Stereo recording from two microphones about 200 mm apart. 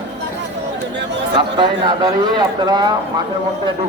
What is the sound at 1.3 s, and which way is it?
Speech, 25° right (ahead or behind).